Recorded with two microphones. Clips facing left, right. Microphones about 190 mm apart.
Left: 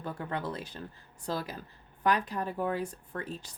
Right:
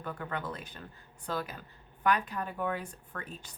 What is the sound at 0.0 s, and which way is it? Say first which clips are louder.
Speech: left 2 dB; 30° left (ahead or behind).